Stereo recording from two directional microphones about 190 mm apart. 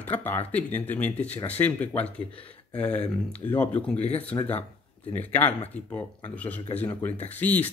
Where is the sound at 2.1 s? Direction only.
30° left (ahead or behind).